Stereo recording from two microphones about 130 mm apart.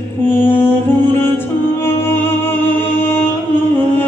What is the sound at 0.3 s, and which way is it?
Music, 15° left (ahead or behind).